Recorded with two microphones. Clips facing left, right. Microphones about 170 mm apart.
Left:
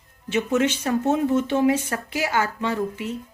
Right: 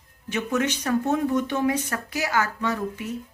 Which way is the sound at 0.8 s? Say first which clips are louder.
Left 2 dB; 25° left (ahead or behind).